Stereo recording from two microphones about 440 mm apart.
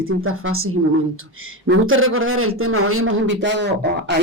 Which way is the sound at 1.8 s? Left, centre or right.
Right.